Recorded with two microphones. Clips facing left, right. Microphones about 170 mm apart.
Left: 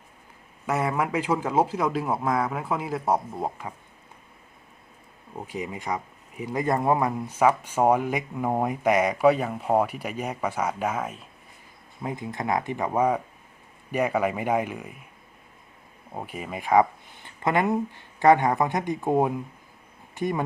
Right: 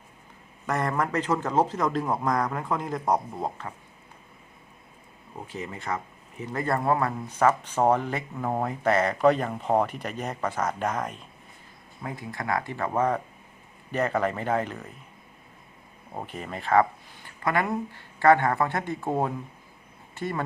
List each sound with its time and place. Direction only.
0.7 s speech: 10° left (ahead or behind)
5.5 s speech: 15° left (ahead or behind)
12.0 s speech: 20° left (ahead or behind)
16.1 s speech: 10° left (ahead or behind)